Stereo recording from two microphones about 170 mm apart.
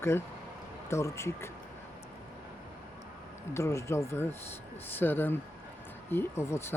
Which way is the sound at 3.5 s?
15° left (ahead or behind).